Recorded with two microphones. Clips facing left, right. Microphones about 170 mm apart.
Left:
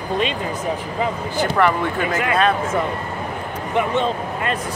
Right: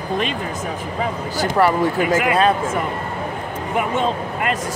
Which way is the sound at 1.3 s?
30° right (ahead or behind).